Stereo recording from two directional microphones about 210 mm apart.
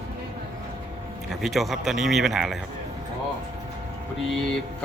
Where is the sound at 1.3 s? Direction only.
Centre (ahead or behind).